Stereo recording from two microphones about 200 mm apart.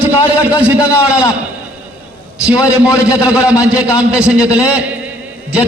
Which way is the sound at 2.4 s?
5° right (ahead or behind).